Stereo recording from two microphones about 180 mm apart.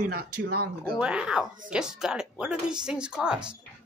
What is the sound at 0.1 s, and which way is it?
Speech, 55° right (ahead or behind).